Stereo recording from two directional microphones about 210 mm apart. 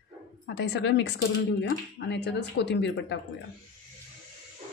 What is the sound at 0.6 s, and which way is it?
Speech, 55° left (ahead or behind).